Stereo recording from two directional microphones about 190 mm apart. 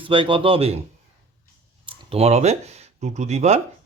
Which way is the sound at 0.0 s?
25° right (ahead or behind).